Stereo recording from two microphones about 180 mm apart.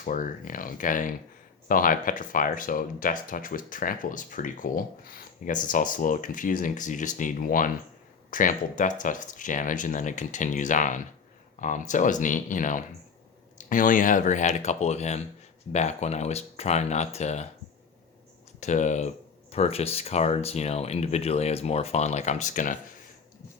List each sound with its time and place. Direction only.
0.0 s speech: 50° left (ahead or behind)
18.6 s speech: 40° left (ahead or behind)